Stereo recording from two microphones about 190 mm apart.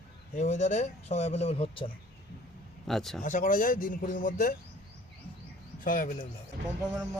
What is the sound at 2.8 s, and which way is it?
Speech, centre (ahead or behind).